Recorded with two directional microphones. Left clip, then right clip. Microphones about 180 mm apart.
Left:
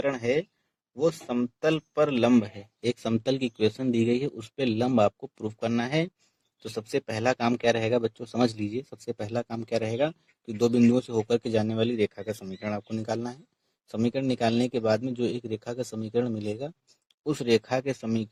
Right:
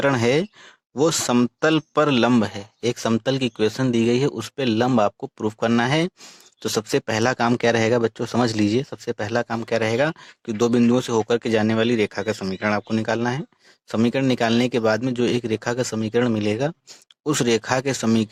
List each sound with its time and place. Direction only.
0.0 s speech: 35° right (ahead or behind)